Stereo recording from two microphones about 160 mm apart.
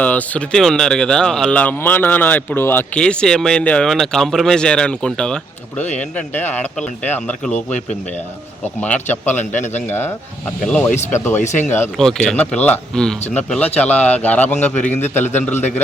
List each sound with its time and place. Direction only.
0.0 s speech: 10° left (ahead or behind)
8.8 s speech: 10° left (ahead or behind)
11.3 s speech: 50° left (ahead or behind)
11.6 s speech: 15° left (ahead or behind)